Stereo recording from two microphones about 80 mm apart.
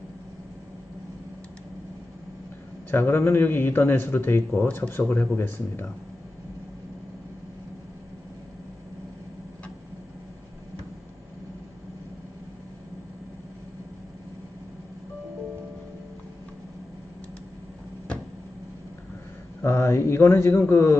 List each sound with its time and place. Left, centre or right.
2.9 s speech: left
19.6 s speech: left